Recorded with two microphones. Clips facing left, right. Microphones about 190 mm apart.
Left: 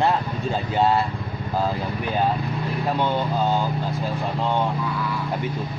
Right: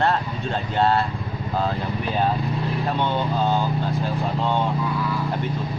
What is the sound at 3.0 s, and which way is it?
Speech, 15° left (ahead or behind).